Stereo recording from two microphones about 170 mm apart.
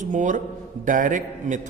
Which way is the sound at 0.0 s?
45° right (ahead or behind).